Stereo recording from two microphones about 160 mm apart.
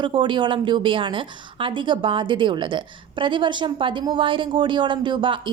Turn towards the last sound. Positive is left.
turn(degrees=-30)  # may be behind; listen again after turning